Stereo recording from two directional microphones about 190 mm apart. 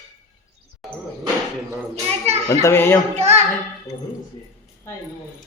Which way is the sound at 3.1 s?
35° right (ahead or behind).